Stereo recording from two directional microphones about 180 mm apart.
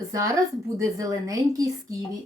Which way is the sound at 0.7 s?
20° right (ahead or behind).